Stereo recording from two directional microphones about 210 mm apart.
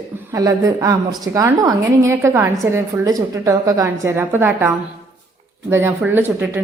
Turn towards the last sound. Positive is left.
turn(degrees=-10)  # may be behind; listen again after turning